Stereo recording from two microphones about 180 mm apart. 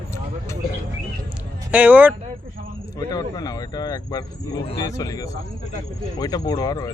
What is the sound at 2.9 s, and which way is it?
Speech, 20° left (ahead or behind).